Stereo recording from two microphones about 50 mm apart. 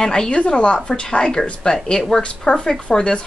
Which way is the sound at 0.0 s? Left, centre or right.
Centre.